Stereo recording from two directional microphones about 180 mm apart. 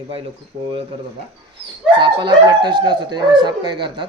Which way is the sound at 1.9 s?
25° right (ahead or behind).